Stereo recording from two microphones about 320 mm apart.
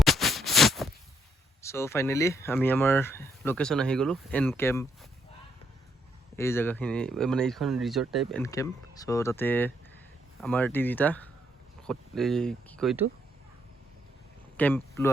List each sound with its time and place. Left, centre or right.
0.0 s a sound: centre
1.6 s speech: centre
6.3 s speech: centre
14.5 s speech: centre